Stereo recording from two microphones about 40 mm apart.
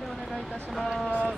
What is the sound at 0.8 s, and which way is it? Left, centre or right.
Speech, centre.